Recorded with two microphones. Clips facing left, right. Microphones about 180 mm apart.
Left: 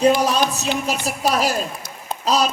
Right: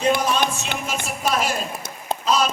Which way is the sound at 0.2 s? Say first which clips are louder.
Left 3 dB; 35° left (ahead or behind).